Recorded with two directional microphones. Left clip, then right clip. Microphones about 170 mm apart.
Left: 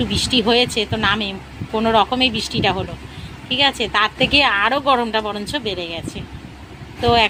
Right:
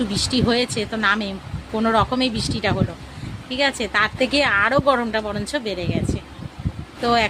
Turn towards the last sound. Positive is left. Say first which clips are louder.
# left 4 dB
turn(degrees=-20)  # may be behind; listen again after turning